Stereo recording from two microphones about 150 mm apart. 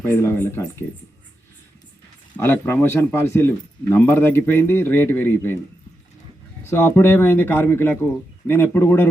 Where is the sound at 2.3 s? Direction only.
15° left (ahead or behind).